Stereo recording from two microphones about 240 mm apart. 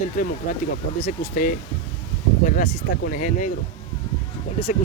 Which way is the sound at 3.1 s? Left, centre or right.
Left.